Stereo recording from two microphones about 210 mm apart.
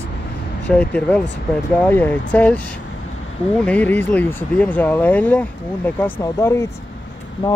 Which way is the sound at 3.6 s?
5° left (ahead or behind).